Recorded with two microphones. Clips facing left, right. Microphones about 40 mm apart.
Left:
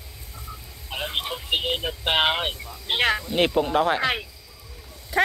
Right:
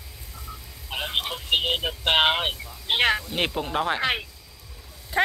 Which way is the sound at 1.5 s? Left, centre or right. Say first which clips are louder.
Right 2 dB; right.